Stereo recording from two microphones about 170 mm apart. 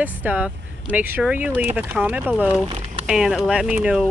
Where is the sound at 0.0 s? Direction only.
10° right (ahead or behind).